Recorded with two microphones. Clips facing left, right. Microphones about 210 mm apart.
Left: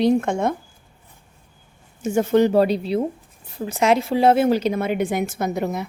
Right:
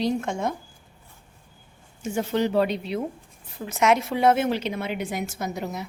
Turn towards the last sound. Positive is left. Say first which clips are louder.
# left 7 dB
turn(degrees=55)  # may be behind; listen again after turning